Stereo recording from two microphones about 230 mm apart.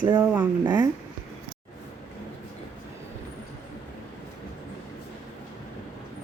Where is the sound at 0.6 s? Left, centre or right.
Centre.